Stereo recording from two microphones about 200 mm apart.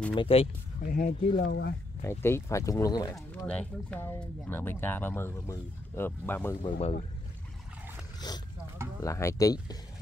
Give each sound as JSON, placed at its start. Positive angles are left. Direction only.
{"t": 0.1, "sound": "speech", "side_deg": 25}
{"t": 0.8, "sound": "speech", "side_deg": 45}
{"t": 2.0, "sound": "speech", "side_deg": 15}
{"t": 3.4, "sound": "speech", "side_deg": 5}
{"t": 6.6, "sound": "speech", "side_deg": 30}
{"t": 8.3, "sound": "speech", "side_deg": 20}